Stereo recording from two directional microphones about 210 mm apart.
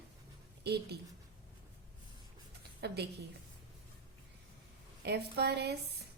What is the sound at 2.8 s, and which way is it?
Speech, 50° right (ahead or behind).